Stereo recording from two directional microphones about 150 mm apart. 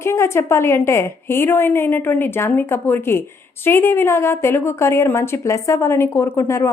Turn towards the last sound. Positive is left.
turn(degrees=15)  # may be behind; listen again after turning